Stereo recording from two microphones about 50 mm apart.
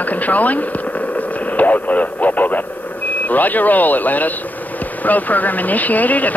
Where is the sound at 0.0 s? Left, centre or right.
Left.